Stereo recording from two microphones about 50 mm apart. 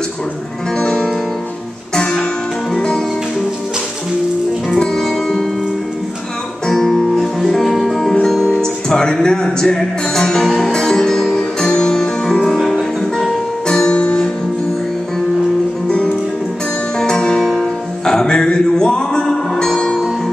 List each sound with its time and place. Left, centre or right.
0.7 s music: centre
2.7 s music: centre
4.6 s music: centre
6.7 s music: centre
13.2 s music: centre
15.9 s music: left